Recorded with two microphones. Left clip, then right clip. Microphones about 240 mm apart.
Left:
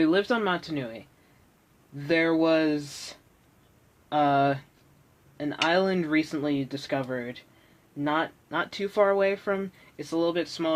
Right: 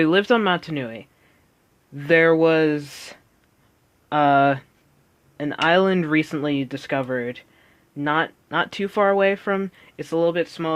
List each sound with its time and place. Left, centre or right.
0.0 s speech: right